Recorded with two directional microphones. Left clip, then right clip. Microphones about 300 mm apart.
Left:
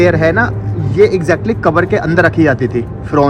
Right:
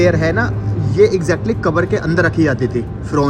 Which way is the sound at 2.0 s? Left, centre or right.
Left.